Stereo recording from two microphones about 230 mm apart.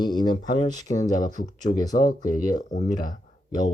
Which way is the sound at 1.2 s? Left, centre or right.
Left.